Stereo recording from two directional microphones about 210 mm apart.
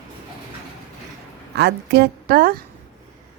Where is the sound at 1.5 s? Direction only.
50° right (ahead or behind).